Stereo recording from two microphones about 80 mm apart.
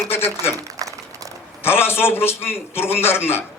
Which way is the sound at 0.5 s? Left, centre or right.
Right.